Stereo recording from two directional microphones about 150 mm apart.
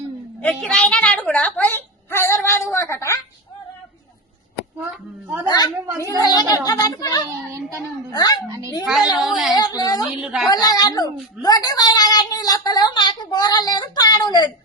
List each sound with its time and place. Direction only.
0.4 s a woman's voice: 5° left (ahead or behind)
4.9 s speech: 15° right (ahead or behind)
5.5 s a woman's voice: 25° left (ahead or behind)
7.5 s speech: 20° right (ahead or behind)
8.1 s a woman's voice: 25° left (ahead or behind)
8.4 s speech: 25° right (ahead or behind)
9.1 s a woman's voice: centre (ahead or behind)
9.6 s a woman's voice: 25° left (ahead or behind)
10.1 s a woman's voice: 5° right (ahead or behind)
10.5 s a woman's voice: 25° left (ahead or behind)